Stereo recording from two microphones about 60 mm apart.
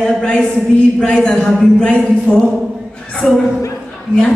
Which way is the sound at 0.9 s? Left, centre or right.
Centre.